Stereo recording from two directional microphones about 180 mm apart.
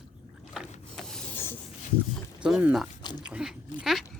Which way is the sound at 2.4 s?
5° right (ahead or behind).